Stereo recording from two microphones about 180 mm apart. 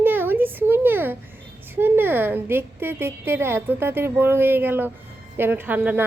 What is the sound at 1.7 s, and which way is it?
A woman's voice, 10° right (ahead or behind).